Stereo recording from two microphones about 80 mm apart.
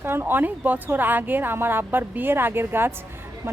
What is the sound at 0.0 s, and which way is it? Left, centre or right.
A woman's voice, right.